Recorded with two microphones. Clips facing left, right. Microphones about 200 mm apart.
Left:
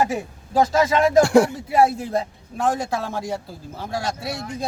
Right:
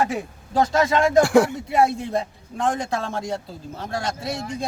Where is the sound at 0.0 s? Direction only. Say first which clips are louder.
Left 1 dB; 5° left (ahead or behind).